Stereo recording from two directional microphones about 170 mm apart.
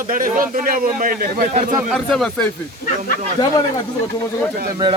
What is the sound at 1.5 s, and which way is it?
Speech, 50° right (ahead or behind).